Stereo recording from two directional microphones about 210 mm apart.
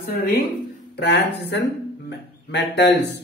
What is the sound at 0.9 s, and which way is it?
Speech, 50° left (ahead or behind).